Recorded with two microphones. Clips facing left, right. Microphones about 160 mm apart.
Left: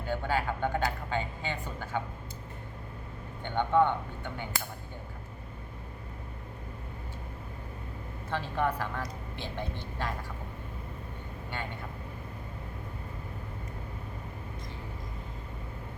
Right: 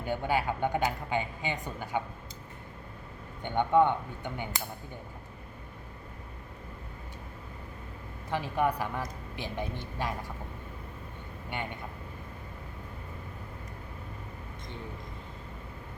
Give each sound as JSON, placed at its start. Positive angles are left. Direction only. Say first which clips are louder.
{"t": 0.0, "sound": "a man's voice", "louder": "right 1 dB", "side_deg": -15}
{"t": 3.4, "sound": "a man's voice", "louder": "right 1 dB", "side_deg": -15}
{"t": 8.3, "sound": "a man's voice", "louder": "right 2 dB", "side_deg": -15}